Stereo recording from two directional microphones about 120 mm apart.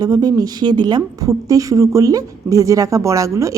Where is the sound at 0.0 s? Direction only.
35° right (ahead or behind).